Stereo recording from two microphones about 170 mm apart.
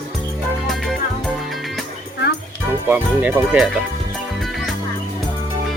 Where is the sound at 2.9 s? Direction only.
5° right (ahead or behind).